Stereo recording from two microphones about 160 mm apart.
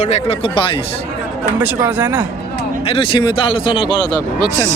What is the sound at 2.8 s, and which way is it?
Speech, 35° left (ahead or behind).